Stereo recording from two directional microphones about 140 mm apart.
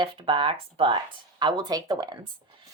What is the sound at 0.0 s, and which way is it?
A woman's voice, 35° right (ahead or behind).